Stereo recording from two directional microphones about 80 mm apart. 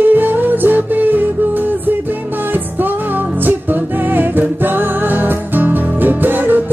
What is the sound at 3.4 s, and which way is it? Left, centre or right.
Music, right.